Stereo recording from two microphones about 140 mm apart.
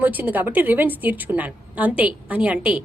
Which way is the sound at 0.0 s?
10° right (ahead or behind).